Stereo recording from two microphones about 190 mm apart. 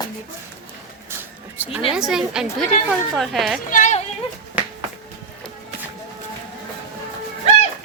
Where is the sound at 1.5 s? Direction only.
10° right (ahead or behind).